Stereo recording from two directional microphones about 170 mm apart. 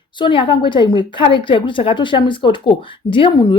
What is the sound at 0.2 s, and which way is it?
A woman's voice, 30° left (ahead or behind).